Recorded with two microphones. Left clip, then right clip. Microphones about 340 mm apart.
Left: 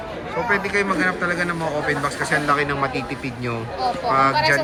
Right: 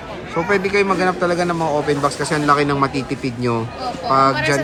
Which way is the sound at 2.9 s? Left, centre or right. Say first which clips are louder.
Right 3 dB; right.